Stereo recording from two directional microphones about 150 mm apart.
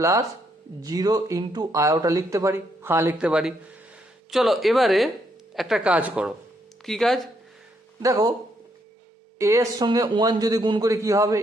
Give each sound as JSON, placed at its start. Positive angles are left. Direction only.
{"t": 0.0, "sound": "speech", "side_deg": -20}
{"t": 8.0, "sound": "speech", "side_deg": -25}
{"t": 9.4, "sound": "speech", "side_deg": -20}